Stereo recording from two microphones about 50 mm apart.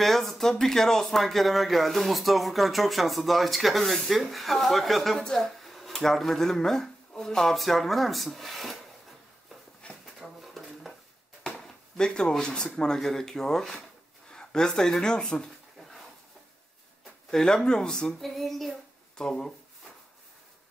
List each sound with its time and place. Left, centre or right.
0.0 s speech: centre
9.8 s a sound: left
10.2 s a sound: centre
12.0 s speech: centre
17.3 s speech: centre
18.2 s child singing: centre